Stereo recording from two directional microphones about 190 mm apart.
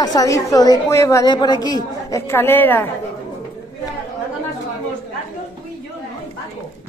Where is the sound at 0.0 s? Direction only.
20° left (ahead or behind).